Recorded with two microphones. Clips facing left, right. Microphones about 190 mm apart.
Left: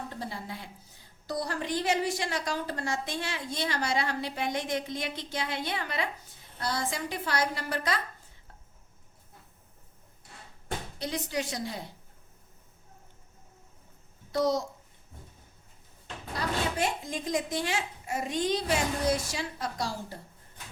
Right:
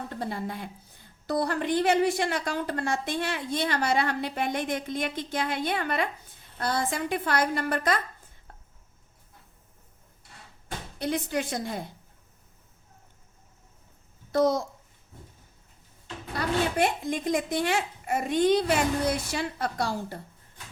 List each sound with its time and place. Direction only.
0.2 s a woman's voice: 55° right (ahead or behind)
11.0 s a woman's voice: 55° right (ahead or behind)
14.3 s a woman's voice: 55° right (ahead or behind)
16.7 s a woman's voice: 60° right (ahead or behind)